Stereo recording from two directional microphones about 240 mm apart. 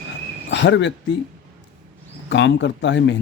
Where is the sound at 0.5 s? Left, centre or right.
Left.